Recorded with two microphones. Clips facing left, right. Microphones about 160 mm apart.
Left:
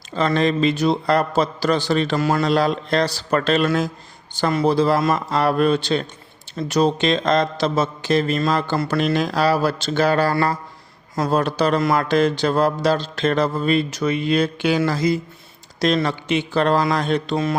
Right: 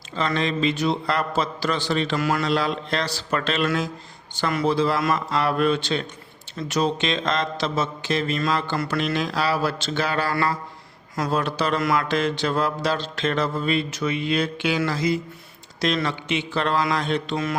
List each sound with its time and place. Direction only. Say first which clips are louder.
0.1 s speech: left 5 dB; 40° left (ahead or behind)
2.2 s speech: left 4 dB; 30° left (ahead or behind)
2.5 s speech: left 5 dB; 40° left (ahead or behind)